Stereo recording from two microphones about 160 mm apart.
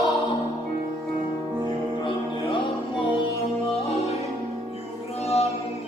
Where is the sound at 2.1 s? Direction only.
30° left (ahead or behind).